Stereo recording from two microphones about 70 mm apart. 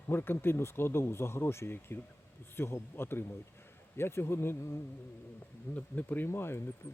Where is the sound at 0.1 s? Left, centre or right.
Left.